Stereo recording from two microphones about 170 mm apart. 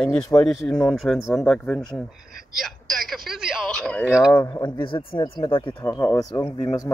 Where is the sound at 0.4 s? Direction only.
5° left (ahead or behind).